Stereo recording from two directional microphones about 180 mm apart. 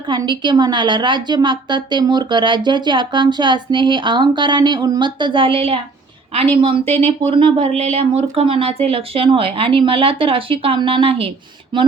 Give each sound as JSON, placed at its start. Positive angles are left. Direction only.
{"t": 0.1, "sound": "a woman's voice", "side_deg": -25}